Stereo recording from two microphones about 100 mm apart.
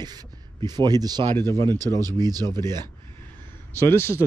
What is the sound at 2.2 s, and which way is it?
Speech, 40° right (ahead or behind).